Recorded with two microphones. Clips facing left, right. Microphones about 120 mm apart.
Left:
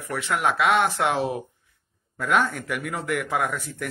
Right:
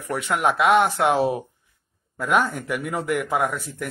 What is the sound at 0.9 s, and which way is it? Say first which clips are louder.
Speech: right 4 dB; 45° right (ahead or behind).